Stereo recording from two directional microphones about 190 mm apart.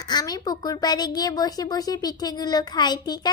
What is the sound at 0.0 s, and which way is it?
Speech, 20° left (ahead or behind).